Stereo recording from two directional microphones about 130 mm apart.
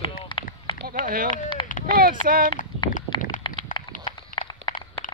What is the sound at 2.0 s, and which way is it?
Speech, 90° right.